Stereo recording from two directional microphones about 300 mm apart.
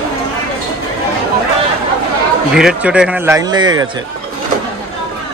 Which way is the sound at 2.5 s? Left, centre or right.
Centre.